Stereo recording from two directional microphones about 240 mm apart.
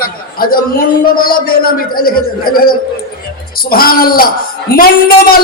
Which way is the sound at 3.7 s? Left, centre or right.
Left.